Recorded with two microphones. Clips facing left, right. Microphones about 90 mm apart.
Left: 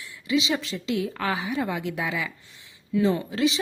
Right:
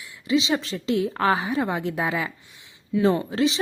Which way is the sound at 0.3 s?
30° right (ahead or behind).